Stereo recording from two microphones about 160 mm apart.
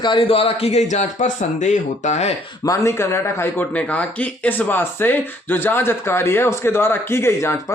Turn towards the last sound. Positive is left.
turn(degrees=15)  # may be behind; listen again after turning